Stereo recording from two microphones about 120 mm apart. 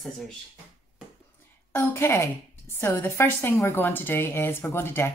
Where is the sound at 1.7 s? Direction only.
20° left (ahead or behind).